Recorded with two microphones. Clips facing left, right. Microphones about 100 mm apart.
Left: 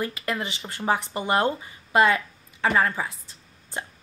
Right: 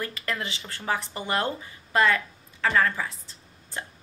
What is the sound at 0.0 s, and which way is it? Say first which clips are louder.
Speech: left 3 dB; 15° left (ahead or behind).